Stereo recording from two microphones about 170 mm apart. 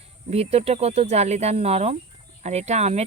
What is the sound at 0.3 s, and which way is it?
A woman's voice, 35° right (ahead or behind).